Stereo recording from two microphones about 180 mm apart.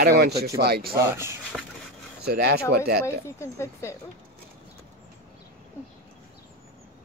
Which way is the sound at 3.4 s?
15° left (ahead or behind).